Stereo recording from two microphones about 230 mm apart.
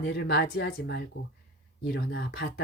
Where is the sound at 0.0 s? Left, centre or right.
Left.